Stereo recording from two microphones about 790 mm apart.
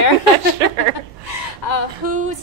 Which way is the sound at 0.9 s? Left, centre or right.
Left.